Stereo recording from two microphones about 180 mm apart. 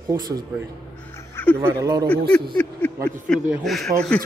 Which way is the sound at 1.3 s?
10° left (ahead or behind).